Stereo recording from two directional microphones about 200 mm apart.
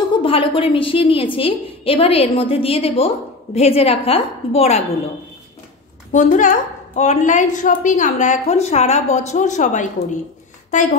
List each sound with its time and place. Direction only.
0.1 s a woman's voice: 25° left (ahead or behind)
6.1 s a woman's voice: 40° left (ahead or behind)